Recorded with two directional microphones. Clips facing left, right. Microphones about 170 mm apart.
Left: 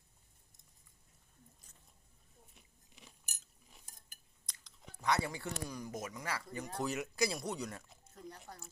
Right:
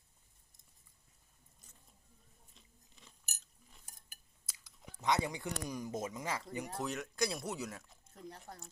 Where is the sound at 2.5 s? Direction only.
15° left (ahead or behind).